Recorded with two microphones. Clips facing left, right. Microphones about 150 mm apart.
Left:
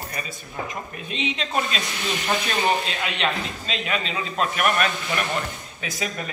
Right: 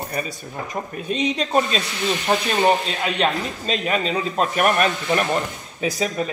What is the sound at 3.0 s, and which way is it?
A man's voice, 40° right (ahead or behind).